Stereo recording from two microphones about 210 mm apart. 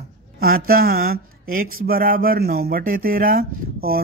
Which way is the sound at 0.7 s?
45° right (ahead or behind).